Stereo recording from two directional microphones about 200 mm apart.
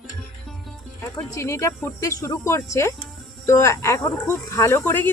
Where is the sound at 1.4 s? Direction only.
15° left (ahead or behind).